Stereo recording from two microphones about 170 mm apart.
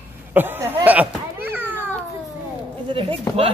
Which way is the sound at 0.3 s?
10° right (ahead or behind).